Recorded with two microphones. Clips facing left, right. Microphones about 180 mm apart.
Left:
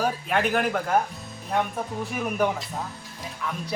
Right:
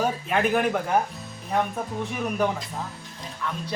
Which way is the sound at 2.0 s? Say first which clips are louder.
Left 1 dB; 5° left (ahead or behind).